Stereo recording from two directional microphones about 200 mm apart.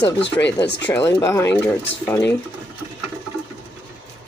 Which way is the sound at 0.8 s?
10° left (ahead or behind).